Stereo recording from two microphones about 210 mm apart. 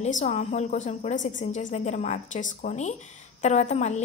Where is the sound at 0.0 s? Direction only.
35° left (ahead or behind).